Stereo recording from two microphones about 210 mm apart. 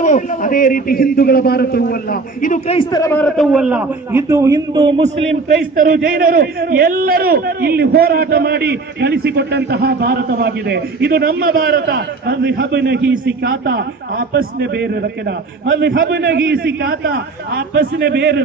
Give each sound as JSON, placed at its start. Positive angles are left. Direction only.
{"t": 0.0, "sound": "a man's voice", "side_deg": 40}
{"t": 2.8, "sound": "a man's voice", "side_deg": 15}